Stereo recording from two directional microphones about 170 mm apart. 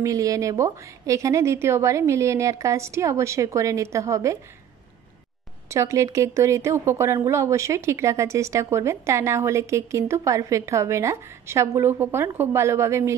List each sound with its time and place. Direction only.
0.0 s speech: 20° right (ahead or behind)
5.7 s speech: 20° right (ahead or behind)